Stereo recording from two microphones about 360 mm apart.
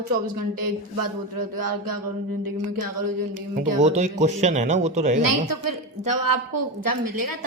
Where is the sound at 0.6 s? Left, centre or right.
Right.